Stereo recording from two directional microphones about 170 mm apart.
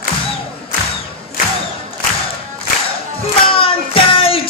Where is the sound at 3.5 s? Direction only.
30° left (ahead or behind).